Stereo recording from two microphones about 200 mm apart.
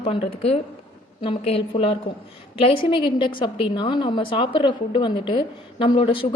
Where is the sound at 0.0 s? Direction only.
30° left (ahead or behind).